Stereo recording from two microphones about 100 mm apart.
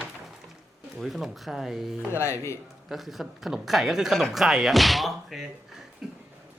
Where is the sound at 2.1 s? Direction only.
25° left (ahead or behind).